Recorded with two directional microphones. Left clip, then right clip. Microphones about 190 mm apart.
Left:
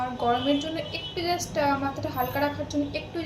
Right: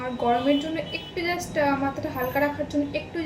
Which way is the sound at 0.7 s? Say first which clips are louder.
Right 2 dB; 20° right (ahead or behind).